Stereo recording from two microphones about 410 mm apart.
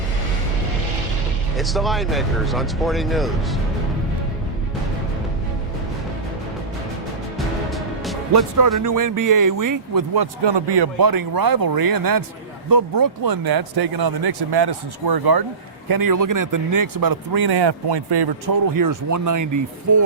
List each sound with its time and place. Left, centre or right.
1.5 s speech: centre
7.3 s music: centre
8.3 s a man's voice: right
10.4 s speech: right
15.9 s a man's voice: right